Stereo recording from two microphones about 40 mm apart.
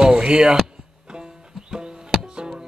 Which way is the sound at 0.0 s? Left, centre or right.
Right.